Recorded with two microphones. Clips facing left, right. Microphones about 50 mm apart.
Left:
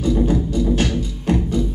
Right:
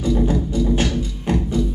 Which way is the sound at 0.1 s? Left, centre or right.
Centre.